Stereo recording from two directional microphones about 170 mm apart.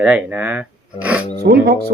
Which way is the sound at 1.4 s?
75° right (ahead or behind).